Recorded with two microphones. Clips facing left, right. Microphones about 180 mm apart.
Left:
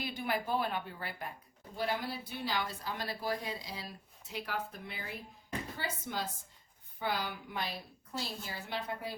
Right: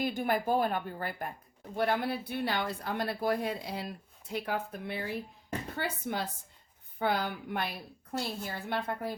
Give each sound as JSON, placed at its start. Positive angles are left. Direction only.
{"t": 0.0, "sound": "a woman's voice", "side_deg": -50}
{"t": 1.7, "sound": "a woman's voice", "side_deg": -60}